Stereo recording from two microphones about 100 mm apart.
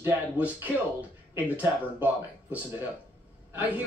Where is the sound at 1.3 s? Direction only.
20° right (ahead or behind).